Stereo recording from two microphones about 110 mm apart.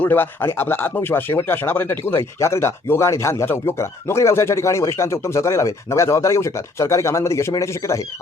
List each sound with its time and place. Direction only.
0.0 s speech: 15° left (ahead or behind)